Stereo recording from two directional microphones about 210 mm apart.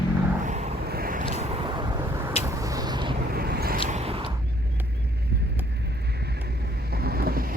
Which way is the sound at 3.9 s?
30° right (ahead or behind).